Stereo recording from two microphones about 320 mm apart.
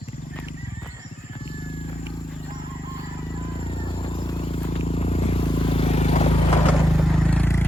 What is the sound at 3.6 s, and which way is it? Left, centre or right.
Vehicle, centre.